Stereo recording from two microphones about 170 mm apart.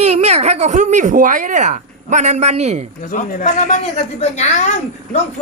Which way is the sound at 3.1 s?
50° left (ahead or behind).